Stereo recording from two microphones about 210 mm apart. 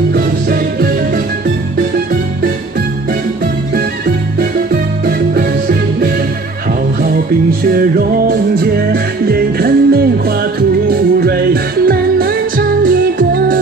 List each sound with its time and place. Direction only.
0.1 s music: 45° right (ahead or behind)
4.4 s music: 45° right (ahead or behind)
7.6 s music: 45° right (ahead or behind)